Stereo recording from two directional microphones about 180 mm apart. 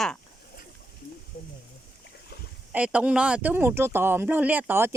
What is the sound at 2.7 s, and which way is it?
Speech, 5° right (ahead or behind).